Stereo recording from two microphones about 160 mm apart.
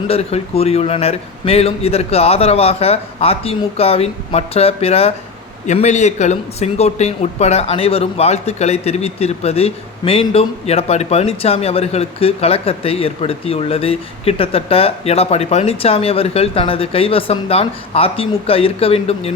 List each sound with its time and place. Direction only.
0.1 s speech: 40° left (ahead or behind)